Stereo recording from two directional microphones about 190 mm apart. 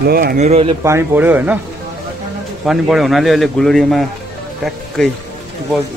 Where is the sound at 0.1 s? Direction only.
50° right (ahead or behind).